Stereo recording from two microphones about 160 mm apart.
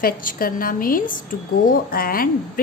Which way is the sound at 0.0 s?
60° left (ahead or behind).